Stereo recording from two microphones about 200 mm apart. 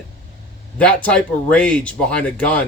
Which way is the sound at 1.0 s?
5° left (ahead or behind).